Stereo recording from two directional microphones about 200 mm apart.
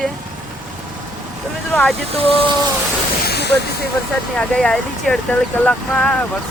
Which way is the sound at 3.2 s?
55° left (ahead or behind).